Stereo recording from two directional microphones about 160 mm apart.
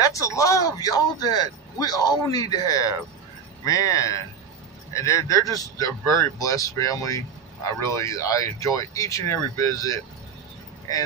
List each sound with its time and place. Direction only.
0.0 s speech: 20° left (ahead or behind)